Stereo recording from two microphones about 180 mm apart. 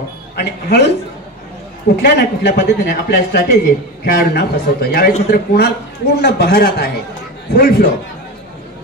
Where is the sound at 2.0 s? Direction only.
65° left (ahead or behind).